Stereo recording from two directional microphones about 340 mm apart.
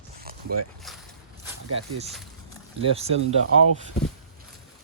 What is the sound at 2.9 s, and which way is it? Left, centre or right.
Speech, centre.